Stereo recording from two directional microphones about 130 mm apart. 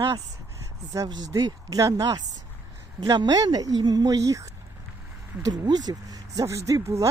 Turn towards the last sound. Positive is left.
turn(degrees=-25)  # may be behind; listen again after turning